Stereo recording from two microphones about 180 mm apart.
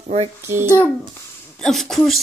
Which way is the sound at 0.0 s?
35° right (ahead or behind).